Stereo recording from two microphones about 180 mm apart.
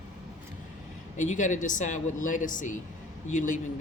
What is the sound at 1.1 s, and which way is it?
Speech, 45° left (ahead or behind).